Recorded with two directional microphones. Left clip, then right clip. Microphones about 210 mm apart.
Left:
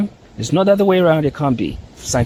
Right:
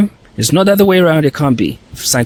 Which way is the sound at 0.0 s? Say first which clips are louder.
Right 8 dB; 50° right (ahead or behind).